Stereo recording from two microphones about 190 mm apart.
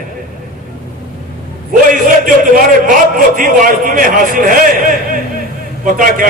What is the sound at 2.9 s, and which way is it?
A man's voice, 45° right (ahead or behind).